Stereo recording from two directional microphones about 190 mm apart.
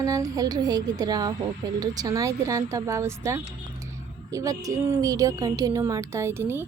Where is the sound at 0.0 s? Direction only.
20° right (ahead or behind).